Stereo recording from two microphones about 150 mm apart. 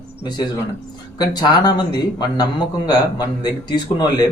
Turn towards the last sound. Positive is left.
turn(degrees=30)  # may be behind; listen again after turning